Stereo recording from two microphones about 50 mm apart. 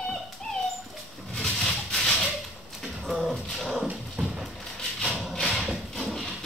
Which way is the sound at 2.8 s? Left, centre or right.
Centre.